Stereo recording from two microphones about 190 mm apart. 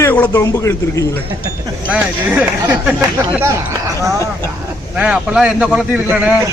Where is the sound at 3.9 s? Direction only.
15° right (ahead or behind).